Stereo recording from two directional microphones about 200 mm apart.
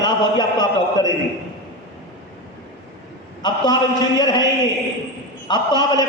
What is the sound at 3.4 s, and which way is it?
A man's voice, 20° left (ahead or behind).